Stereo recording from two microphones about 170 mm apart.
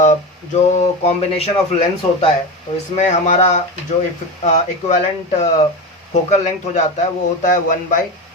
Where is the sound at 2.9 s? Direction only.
45° left (ahead or behind).